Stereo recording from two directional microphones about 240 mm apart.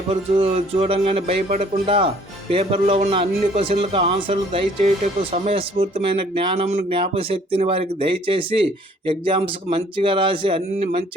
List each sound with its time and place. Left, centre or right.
0.1 s speech: right